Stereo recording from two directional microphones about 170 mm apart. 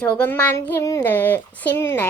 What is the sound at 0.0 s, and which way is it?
Speech, 10° left (ahead or behind).